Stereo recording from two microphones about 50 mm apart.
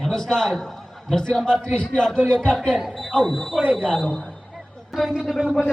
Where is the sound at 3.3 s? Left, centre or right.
Centre.